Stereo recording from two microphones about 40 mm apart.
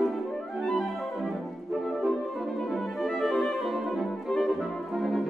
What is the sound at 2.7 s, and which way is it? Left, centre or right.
Music, centre.